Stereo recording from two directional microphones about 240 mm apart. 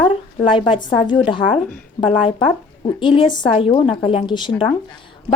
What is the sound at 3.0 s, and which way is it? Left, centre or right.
A woman's voice, centre.